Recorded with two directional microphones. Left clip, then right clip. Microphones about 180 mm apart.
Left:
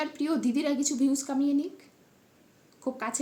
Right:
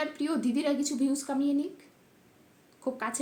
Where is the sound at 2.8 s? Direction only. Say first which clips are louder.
Even; 10° left (ahead or behind).